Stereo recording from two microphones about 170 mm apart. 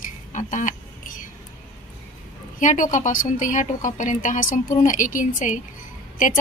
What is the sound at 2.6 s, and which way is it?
A woman's voice, 45° left (ahead or behind).